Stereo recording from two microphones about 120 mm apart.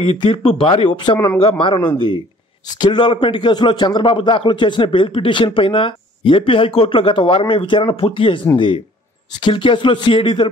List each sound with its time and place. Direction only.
0.0 s a man's voice: 45° left (ahead or behind)
2.6 s a man's voice: 35° left (ahead or behind)